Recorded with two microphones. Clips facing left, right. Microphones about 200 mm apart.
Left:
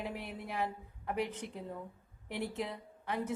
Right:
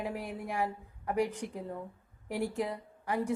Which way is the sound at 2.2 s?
40° right (ahead or behind).